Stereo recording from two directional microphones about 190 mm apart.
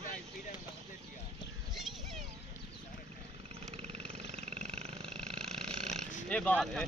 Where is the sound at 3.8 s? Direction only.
35° right (ahead or behind).